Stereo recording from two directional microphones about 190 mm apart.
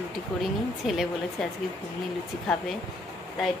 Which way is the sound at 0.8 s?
Centre (ahead or behind).